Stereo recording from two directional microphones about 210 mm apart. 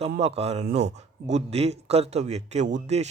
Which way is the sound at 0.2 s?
30° right (ahead or behind).